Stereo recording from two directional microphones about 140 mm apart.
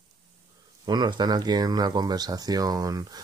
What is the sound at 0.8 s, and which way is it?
Speech, 30° right (ahead or behind).